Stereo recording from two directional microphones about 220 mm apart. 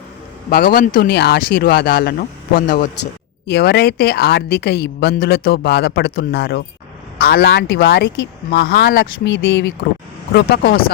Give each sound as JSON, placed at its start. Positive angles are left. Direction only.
{"t": 0.5, "sound": "a woman's voice", "side_deg": 40}